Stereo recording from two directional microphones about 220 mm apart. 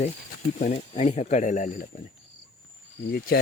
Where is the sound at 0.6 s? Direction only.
30° left (ahead or behind).